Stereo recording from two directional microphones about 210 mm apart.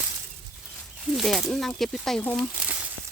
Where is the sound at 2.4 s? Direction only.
5° right (ahead or behind).